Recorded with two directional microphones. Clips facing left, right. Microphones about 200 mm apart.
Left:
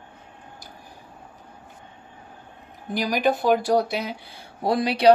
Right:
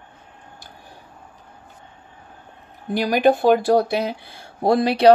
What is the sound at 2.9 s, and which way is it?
Speech, 55° right (ahead or behind).